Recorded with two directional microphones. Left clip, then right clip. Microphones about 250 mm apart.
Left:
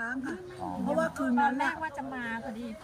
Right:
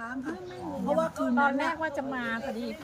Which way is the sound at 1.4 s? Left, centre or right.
Right.